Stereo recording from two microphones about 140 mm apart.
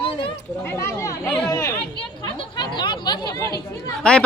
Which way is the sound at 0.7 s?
20° left (ahead or behind).